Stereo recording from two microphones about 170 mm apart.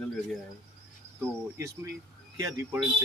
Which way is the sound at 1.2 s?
15° right (ahead or behind).